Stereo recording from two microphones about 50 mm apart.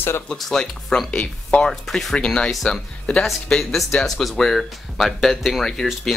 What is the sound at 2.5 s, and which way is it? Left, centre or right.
Speech, centre.